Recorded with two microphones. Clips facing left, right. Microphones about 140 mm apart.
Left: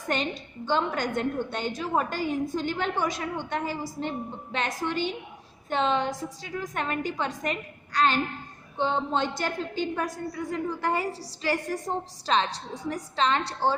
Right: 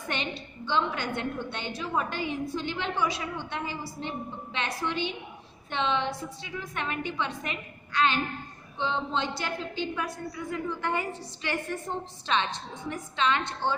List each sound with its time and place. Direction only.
0.1 s a woman's voice: 45° left (ahead or behind)